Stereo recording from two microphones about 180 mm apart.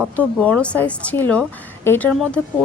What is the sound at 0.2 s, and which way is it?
Speech, 5° left (ahead or behind).